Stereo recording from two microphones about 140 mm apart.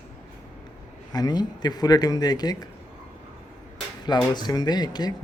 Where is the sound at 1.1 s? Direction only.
30° left (ahead or behind).